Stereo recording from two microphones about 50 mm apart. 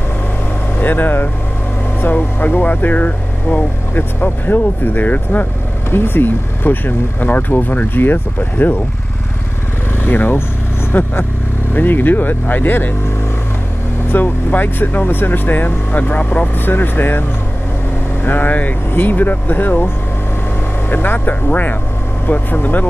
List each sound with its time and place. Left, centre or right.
0.7 s speech: left
3.9 s speech: left
5.9 s speech: left
10.0 s speech: left
14.1 s speech: left
18.2 s speech: left
20.9 s speech: left